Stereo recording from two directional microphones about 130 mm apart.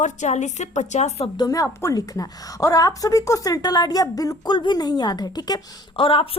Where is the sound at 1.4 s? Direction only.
30° left (ahead or behind).